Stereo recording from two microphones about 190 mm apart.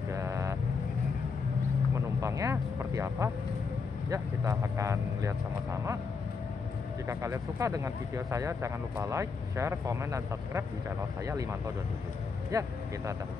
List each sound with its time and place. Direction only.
0.1 s vehicle: 15° right (ahead or behind)
2.0 s speech: 15° right (ahead or behind)
7.1 s speech: 15° right (ahead or behind)
12.4 s speech: 15° right (ahead or behind)